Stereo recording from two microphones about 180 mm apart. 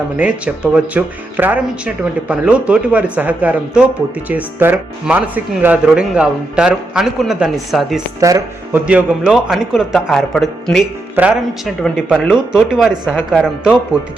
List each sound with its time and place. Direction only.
0.2 s speech: 5° right (ahead or behind)
8.2 s speech: 15° right (ahead or behind)
8.8 s speech: 5° right (ahead or behind)